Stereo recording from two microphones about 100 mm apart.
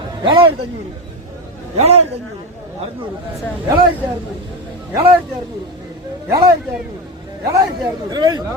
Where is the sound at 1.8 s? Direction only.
90° right.